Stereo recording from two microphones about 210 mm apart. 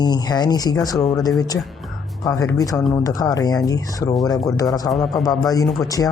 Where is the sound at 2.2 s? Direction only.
15° left (ahead or behind).